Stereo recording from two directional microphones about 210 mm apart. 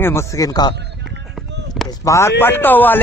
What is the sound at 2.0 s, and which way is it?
Speech, 15° left (ahead or behind).